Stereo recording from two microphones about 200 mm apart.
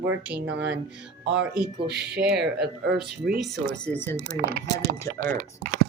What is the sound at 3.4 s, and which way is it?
Speech, 5° left (ahead or behind).